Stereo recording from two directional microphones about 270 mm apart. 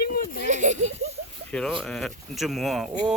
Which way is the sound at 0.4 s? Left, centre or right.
Right.